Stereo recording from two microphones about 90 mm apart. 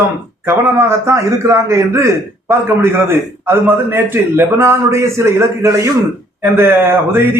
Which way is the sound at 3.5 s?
25° right (ahead or behind).